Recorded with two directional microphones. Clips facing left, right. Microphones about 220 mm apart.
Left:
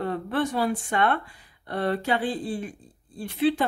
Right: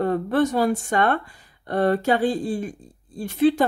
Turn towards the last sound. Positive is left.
turn(degrees=-45)  # may be behind; listen again after turning